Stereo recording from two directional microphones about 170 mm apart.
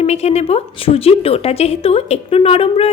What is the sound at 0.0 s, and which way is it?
A woman's voice, 40° left (ahead or behind).